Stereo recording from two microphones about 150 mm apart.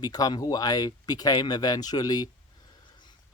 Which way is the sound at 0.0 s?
25° left (ahead or behind).